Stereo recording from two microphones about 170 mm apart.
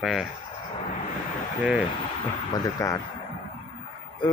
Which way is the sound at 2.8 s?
20° left (ahead or behind).